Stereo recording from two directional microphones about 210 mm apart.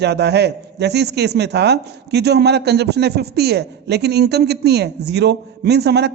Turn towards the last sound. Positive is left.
turn(degrees=-50)  # may be behind; listen again after turning